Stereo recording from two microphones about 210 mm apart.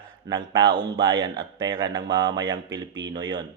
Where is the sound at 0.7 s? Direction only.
20° right (ahead or behind).